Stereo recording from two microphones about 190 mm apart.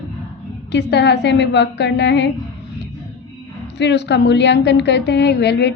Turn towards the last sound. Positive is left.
turn(degrees=60)  # may be behind; listen again after turning